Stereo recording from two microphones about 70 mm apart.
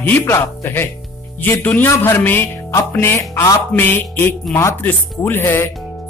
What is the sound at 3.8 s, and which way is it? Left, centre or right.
Speech, left.